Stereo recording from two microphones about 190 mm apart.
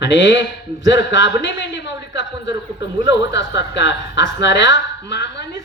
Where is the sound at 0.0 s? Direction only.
70° left (ahead or behind).